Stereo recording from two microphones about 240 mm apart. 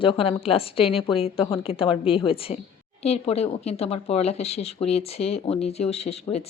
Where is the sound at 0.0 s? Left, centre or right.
Left.